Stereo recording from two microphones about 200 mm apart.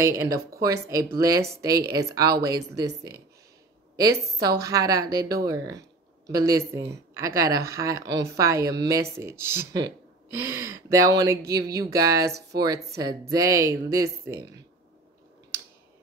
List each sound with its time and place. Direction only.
0.4 s a woman's voice: 15° right (ahead or behind)